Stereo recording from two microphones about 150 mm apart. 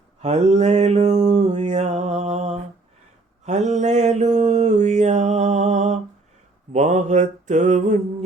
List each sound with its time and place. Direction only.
0.2 s mantra: 50° right (ahead or behind)